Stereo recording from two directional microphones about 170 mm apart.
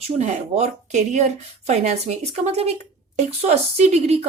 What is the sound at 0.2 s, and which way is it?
Speech, 40° right (ahead or behind).